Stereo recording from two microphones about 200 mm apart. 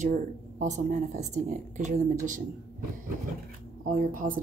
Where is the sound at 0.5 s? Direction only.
35° right (ahead or behind).